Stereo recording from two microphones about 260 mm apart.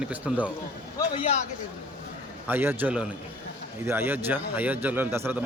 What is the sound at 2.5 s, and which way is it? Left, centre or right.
A man's voice, centre.